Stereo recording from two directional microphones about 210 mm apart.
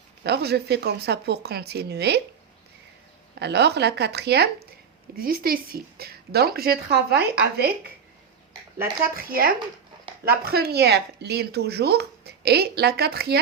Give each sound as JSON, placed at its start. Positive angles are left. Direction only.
{"t": 0.2, "sound": "a woman's voice", "side_deg": -50}
{"t": 3.3, "sound": "a woman's voice", "side_deg": -55}
{"t": 9.1, "sound": "a woman's voice", "side_deg": -45}